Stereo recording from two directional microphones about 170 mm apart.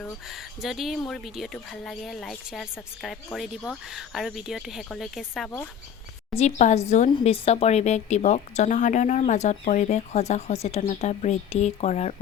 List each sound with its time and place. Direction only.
0.6 s speech: centre (ahead or behind)
6.3 s a woman's voice: 40° left (ahead or behind)
7.1 s a woman's voice: 30° left (ahead or behind)